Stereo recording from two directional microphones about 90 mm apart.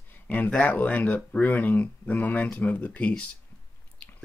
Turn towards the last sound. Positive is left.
turn(degrees=15)  # may be behind; listen again after turning